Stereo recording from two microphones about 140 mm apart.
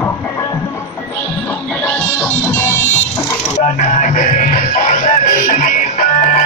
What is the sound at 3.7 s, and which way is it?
Music, 65° left (ahead or behind).